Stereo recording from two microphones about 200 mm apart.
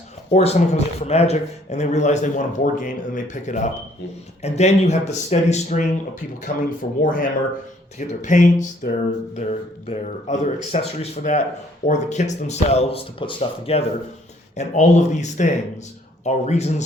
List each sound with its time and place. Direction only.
0.3 s speech: 35° left (ahead or behind)
7.0 s speech: 40° left (ahead or behind)